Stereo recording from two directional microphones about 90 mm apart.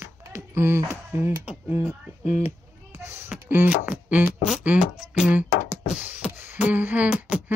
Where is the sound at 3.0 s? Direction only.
30° right (ahead or behind).